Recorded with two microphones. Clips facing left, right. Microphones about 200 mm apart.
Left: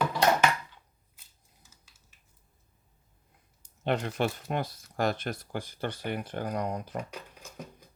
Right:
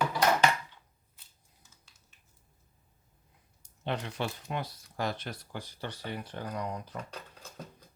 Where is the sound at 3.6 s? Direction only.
50° left (ahead or behind).